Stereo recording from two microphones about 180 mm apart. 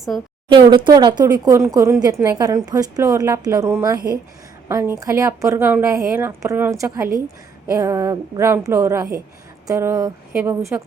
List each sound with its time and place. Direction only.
0.1 s a woman's voice: centre (ahead or behind)
0.4 s a woman's voice: 25° right (ahead or behind)